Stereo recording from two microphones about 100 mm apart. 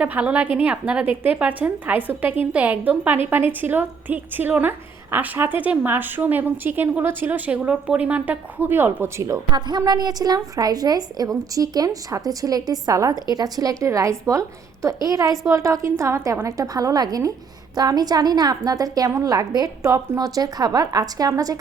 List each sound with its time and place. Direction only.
0.0 s a woman's voice: 15° right (ahead or behind); by 9.4 s 30° right (ahead or behind)
9.5 s a woman's voice: 45° right (ahead or behind)